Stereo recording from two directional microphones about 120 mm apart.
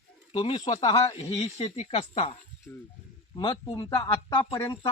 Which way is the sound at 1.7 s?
60° left (ahead or behind).